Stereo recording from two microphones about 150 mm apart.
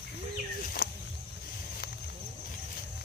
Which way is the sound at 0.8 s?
90° left.